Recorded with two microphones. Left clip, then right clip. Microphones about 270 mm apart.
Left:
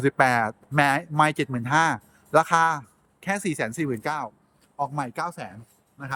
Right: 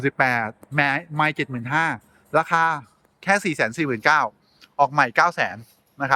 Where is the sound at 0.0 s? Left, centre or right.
Centre.